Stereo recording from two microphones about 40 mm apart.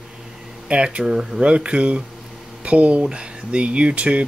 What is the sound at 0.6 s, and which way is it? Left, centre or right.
Speech, right.